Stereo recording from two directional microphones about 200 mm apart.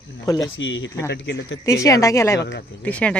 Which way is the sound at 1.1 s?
60° left (ahead or behind).